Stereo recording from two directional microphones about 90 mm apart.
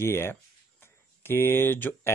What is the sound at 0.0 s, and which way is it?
Speech, 30° left (ahead or behind).